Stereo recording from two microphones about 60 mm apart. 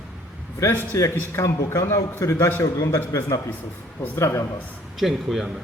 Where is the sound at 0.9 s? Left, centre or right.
Left.